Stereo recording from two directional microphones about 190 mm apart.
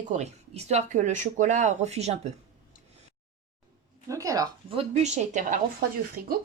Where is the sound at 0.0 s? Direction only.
35° right (ahead or behind).